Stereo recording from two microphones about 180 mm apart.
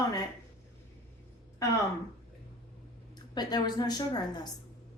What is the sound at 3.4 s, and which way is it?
A woman's voice, 25° left (ahead or behind).